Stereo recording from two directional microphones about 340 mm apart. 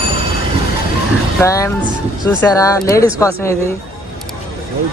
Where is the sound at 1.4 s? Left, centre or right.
Centre.